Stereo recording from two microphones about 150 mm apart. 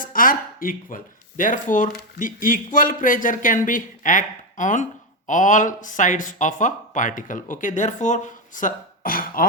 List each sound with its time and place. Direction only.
0.0 s speech: 65° left (ahead or behind)